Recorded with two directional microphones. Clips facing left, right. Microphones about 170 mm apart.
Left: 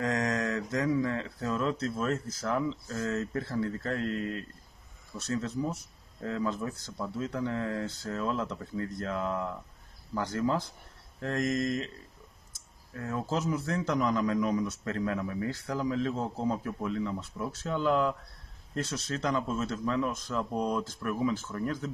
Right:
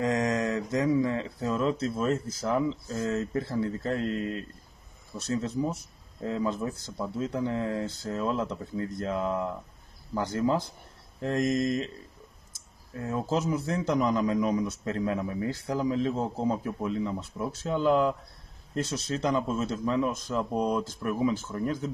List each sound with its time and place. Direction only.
0.0 s a man's voice: 20° right (ahead or behind)
12.9 s a man's voice: 20° right (ahead or behind)